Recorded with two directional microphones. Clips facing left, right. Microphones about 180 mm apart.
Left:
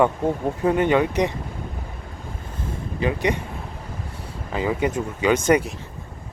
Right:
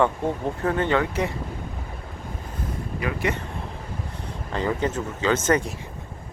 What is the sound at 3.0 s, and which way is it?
Speech, 20° left (ahead or behind).